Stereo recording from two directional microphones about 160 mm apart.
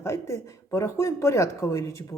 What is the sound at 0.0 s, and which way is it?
A woman's voice, 15° left (ahead or behind).